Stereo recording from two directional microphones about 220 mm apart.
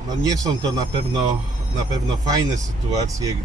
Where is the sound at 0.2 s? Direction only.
15° right (ahead or behind).